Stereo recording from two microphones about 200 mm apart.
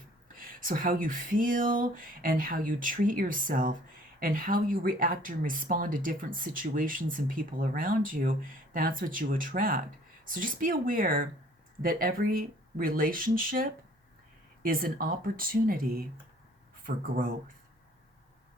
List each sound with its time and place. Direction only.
0.3 s speech: 45° right (ahead or behind)